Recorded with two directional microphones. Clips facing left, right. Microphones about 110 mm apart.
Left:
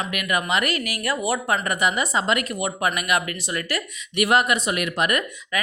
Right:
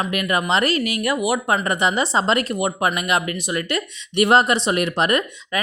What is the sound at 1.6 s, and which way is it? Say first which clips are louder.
Speech: right 3 dB; 25° right (ahead or behind).